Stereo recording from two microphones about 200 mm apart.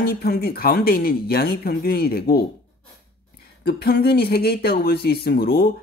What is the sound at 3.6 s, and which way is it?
Speech, 50° left (ahead or behind).